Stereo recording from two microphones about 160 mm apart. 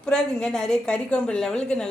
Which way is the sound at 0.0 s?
5° left (ahead or behind).